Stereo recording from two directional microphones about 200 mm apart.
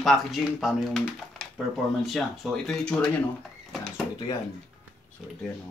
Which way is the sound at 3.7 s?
Centre (ahead or behind).